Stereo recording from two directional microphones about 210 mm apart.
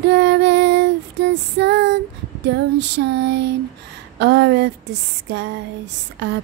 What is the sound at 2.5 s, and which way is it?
Mantra, 55° right (ahead or behind).